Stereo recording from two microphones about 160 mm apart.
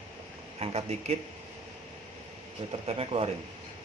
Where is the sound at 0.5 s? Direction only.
40° right (ahead or behind).